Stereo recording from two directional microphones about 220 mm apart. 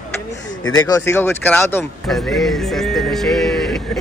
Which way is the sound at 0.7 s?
15° left (ahead or behind).